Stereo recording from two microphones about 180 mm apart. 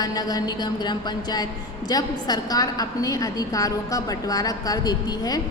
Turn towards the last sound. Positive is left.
turn(degrees=20)  # may be behind; listen again after turning